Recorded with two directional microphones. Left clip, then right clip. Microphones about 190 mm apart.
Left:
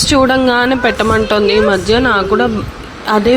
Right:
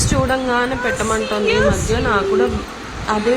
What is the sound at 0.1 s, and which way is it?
Speech, 40° left (ahead or behind).